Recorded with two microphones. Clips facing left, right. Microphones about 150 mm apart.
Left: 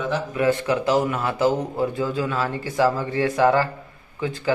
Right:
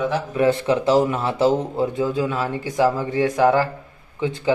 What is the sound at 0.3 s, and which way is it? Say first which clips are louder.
A man's voice: right 3 dB; 25° right (ahead or behind).